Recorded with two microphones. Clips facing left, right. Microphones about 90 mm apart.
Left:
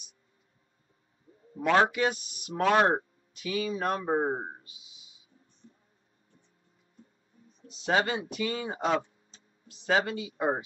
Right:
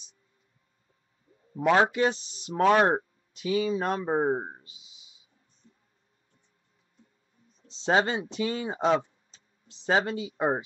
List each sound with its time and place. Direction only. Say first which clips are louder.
1.6 s speech: right 2 dB; 25° right (ahead or behind)
7.6 s speech: right 3 dB; 30° right (ahead or behind)